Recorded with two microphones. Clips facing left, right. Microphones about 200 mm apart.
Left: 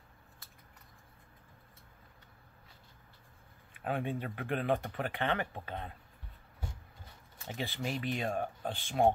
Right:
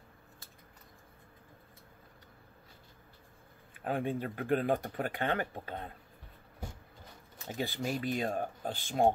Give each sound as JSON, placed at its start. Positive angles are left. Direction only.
{"t": 3.8, "sound": "speech", "side_deg": -40}
{"t": 7.4, "sound": "speech", "side_deg": -40}